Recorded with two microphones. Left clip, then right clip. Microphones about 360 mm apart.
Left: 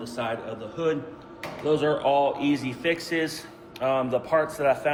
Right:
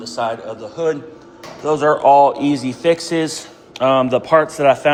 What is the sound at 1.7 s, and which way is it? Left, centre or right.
Speech, right.